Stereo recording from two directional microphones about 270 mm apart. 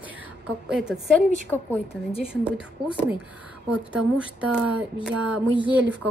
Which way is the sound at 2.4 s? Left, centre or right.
Centre.